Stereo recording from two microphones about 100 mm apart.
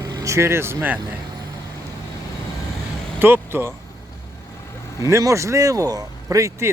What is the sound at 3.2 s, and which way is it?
Speech, 20° right (ahead or behind).